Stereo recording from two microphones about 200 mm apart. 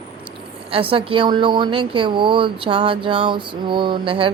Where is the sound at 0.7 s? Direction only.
25° right (ahead or behind).